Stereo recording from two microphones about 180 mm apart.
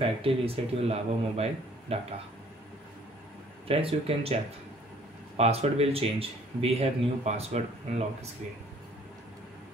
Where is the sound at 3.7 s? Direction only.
30° right (ahead or behind).